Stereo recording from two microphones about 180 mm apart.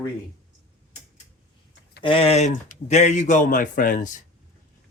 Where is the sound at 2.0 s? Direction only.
30° left (ahead or behind).